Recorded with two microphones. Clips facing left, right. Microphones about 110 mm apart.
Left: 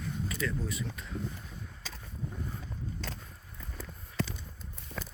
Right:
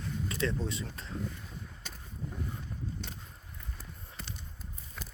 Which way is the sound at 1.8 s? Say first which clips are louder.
Left 2 dB; 90° left.